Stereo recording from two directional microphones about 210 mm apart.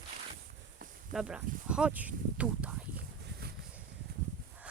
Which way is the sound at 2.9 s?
50° right (ahead or behind).